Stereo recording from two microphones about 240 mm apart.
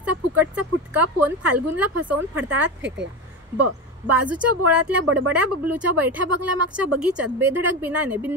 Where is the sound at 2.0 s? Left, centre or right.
Right.